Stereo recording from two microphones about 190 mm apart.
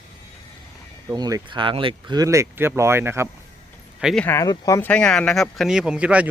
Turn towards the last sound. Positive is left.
turn(degrees=-5)  # may be behind; listen again after turning